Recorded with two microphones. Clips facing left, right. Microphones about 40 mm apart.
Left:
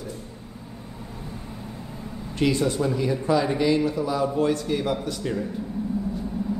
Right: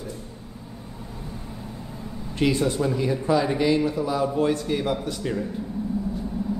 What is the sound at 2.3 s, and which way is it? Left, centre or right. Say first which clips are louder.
Speech: even; centre.